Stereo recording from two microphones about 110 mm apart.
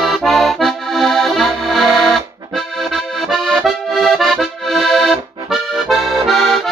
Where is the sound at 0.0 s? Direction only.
Centre (ahead or behind).